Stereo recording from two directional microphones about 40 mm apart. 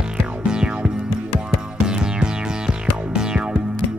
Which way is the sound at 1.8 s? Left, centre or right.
Right.